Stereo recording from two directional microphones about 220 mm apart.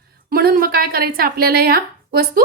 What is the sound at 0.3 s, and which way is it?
A woman's voice, 40° right (ahead or behind).